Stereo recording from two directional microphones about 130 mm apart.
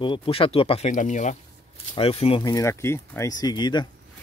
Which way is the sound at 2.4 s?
30° left (ahead or behind).